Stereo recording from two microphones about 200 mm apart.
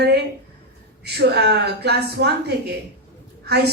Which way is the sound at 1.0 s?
55° right (ahead or behind).